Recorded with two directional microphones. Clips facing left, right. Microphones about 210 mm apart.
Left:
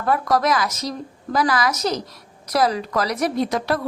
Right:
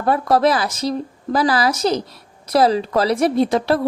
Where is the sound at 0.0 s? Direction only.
30° right (ahead or behind).